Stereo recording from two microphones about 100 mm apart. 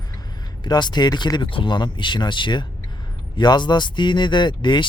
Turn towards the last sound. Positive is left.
turn(degrees=50)  # may be behind; listen again after turning